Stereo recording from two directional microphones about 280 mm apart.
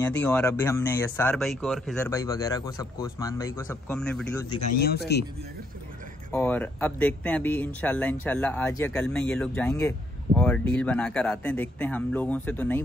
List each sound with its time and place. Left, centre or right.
0.0 s speech: centre
2.0 s speech: centre
4.7 s speech: left
6.3 s speech: centre